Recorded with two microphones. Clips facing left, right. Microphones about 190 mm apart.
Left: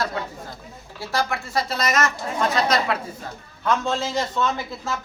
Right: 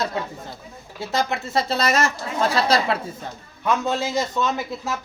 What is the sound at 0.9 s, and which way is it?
A man's voice, 20° right (ahead or behind).